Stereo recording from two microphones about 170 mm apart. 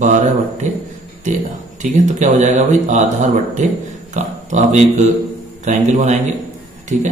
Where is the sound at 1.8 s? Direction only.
45° right (ahead or behind).